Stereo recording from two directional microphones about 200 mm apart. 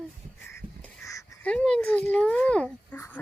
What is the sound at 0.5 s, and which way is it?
Crow, 15° left (ahead or behind).